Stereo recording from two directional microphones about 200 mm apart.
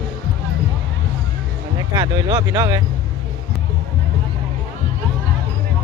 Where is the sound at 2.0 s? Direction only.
20° right (ahead or behind).